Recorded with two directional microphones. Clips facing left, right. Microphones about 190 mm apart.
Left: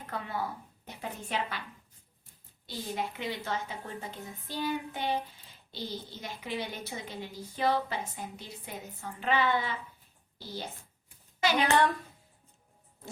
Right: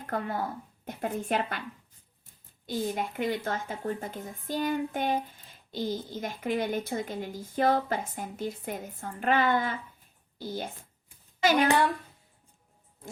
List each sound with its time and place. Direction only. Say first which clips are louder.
0.0 s a woman's voice: right 4 dB; 50° right (ahead or behind)
2.6 s speech: right 5 dB; 50° right (ahead or behind)